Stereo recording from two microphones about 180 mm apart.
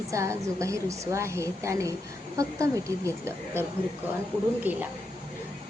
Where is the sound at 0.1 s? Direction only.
15° right (ahead or behind).